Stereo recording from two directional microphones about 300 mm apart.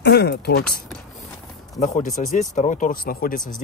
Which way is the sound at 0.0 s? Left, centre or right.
Left.